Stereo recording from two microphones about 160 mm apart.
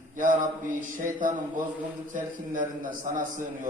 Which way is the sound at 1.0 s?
55° right (ahead or behind).